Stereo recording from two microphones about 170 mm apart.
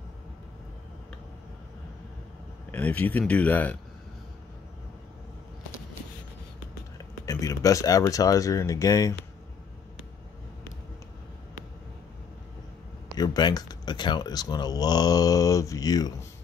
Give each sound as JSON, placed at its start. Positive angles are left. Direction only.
{"t": 2.7, "sound": "speech", "side_deg": 10}
{"t": 7.2, "sound": "speech", "side_deg": 20}
{"t": 13.2, "sound": "speech", "side_deg": 25}